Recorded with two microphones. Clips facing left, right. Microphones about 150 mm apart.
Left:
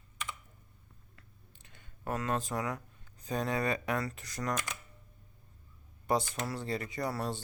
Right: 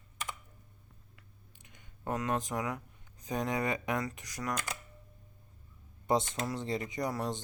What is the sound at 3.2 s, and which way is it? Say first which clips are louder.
Speech: even; 15° right (ahead or behind).